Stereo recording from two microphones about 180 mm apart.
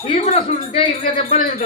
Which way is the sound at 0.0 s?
35° left (ahead or behind).